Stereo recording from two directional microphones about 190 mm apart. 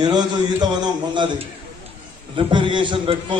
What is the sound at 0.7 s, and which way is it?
A man's voice, 25° right (ahead or behind).